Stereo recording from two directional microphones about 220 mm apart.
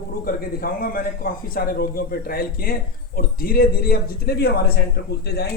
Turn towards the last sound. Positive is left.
turn(degrees=45)  # may be behind; listen again after turning